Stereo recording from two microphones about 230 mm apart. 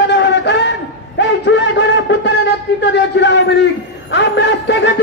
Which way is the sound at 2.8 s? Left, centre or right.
Left.